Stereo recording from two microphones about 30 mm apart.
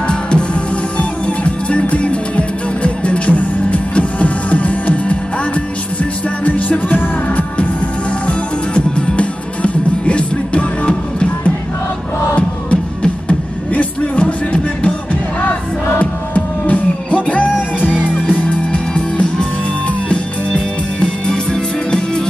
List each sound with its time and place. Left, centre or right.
0.0 s music: left
0.9 s music: left
6.4 s music: left
8.3 s music: left
13.3 s music: left
16.0 s music: left
17.6 s music: left
17.9 s music: right
18.3 s music: left
21.0 s music: centre